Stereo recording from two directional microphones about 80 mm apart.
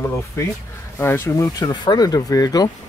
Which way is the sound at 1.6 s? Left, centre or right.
Left.